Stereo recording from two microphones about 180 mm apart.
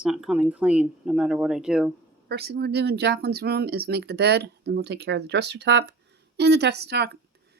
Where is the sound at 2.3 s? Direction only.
60° right (ahead or behind).